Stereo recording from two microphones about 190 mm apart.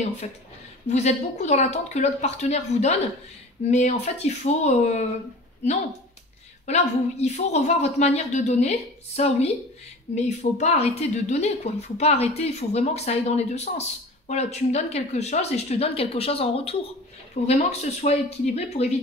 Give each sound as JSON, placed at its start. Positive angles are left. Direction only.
{"t": 0.8, "sound": "speech", "side_deg": 35}
{"t": 6.6, "sound": "speech", "side_deg": 35}